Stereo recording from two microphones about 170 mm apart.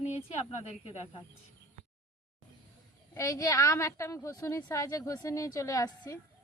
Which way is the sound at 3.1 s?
15° left (ahead or behind).